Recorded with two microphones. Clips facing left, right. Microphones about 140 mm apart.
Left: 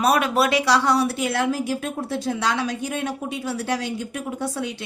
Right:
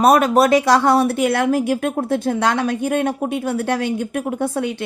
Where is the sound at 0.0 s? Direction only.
45° right (ahead or behind).